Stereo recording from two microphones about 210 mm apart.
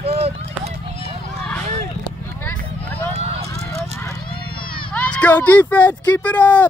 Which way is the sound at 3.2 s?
30° right (ahead or behind).